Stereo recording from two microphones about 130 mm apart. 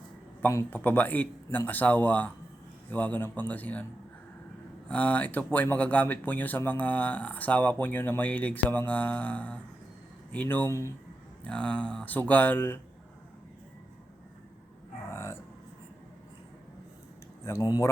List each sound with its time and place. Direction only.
0.4 s speech: 15° left (ahead or behind)
4.9 s speech: 10° left (ahead or behind)
15.1 s a sound: 20° left (ahead or behind)
17.4 s speech: 25° left (ahead or behind)